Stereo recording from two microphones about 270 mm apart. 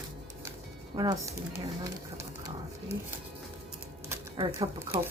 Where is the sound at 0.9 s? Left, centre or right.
Centre.